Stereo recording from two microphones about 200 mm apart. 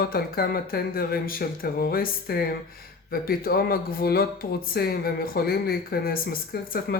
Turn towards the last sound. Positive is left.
turn(degrees=45)  # may be behind; listen again after turning